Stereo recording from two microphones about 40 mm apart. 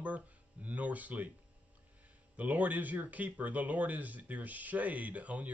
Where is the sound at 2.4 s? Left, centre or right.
Right.